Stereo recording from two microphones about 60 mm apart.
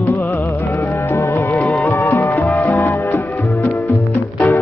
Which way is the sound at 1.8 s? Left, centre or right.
Left.